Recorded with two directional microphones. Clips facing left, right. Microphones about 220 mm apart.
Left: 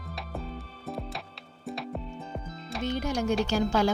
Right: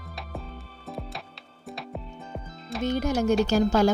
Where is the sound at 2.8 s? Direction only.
45° right (ahead or behind).